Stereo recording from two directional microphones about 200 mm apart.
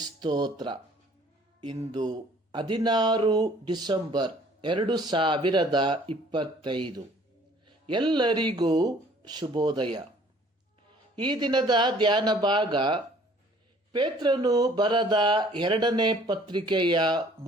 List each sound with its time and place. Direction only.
0.2 s speech: 20° right (ahead or behind)
11.1 s speech: 25° right (ahead or behind)